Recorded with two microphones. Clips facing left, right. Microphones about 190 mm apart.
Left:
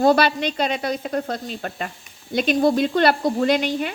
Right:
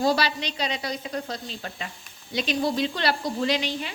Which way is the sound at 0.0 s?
55° left (ahead or behind).